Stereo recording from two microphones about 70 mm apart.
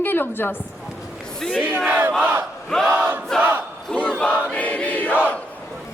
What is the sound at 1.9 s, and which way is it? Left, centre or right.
Battle cry, right.